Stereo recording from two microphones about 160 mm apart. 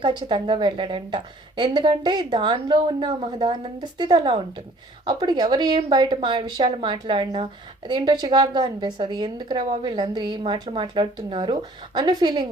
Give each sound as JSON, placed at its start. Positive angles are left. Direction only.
{"t": 0.0, "sound": "a woman's voice", "side_deg": -30}